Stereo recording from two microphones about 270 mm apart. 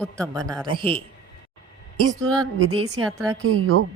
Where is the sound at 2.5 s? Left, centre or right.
Right.